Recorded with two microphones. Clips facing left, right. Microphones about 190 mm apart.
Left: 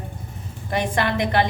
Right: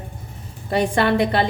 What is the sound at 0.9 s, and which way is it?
Speech, 30° right (ahead or behind).